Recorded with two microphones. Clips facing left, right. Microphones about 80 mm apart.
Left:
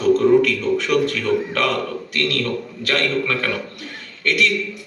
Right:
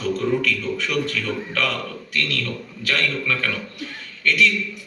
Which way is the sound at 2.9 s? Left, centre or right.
Left.